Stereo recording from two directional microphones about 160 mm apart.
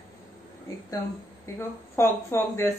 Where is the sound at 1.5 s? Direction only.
15° left (ahead or behind).